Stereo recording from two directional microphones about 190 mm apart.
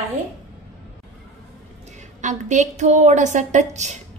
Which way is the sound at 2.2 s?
40° right (ahead or behind).